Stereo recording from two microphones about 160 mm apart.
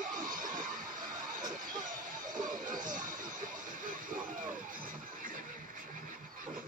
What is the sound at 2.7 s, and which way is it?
Music, 55° right (ahead or behind).